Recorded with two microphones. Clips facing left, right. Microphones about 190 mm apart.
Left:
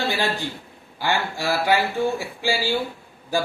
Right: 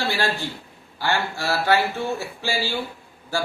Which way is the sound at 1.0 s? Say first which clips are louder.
Left 1 dB; 15° left (ahead or behind).